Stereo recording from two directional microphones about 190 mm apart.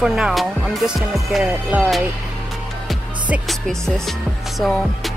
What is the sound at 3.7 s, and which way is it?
Speech, centre (ahead or behind).